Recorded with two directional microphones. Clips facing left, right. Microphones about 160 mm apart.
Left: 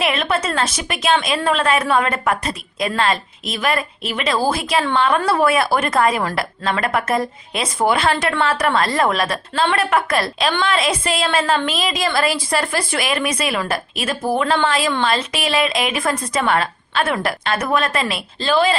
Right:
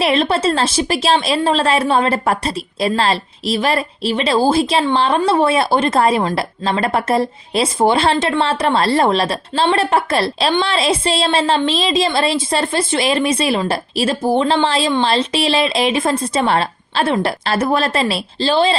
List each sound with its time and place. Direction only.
0.0 s a woman's voice: 30° right (ahead or behind)